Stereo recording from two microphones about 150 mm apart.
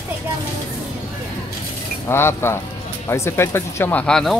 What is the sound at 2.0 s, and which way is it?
Speech, 15° left (ahead or behind).